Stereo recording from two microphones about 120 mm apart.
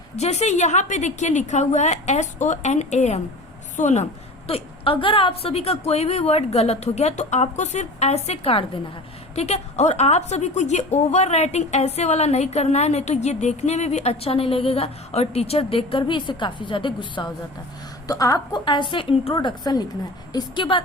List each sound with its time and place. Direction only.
0.2 s a woman's voice: 65° left (ahead or behind); by 8.8 s 50° left (ahead or behind)
9.3 s a woman's voice: 65° left (ahead or behind); by 17.3 s 40° left (ahead or behind)
18.1 s a woman's voice: 30° left (ahead or behind)